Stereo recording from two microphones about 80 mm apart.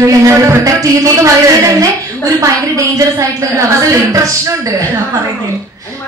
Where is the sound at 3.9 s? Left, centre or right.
Right.